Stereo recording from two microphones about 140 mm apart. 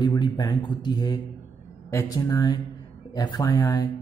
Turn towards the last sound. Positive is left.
turn(degrees=25)  # may be behind; listen again after turning